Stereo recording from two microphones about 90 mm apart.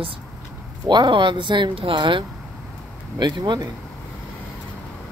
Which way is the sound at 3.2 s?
55° right (ahead or behind).